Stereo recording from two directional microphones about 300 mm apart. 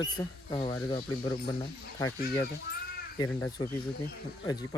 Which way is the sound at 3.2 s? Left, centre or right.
Centre.